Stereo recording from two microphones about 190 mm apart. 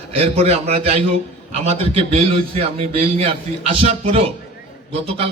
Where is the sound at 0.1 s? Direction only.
30° right (ahead or behind).